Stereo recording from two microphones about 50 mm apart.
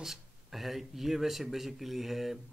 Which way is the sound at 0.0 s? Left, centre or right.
Centre.